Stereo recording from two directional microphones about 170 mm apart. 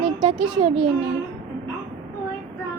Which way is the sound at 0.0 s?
35° right (ahead or behind).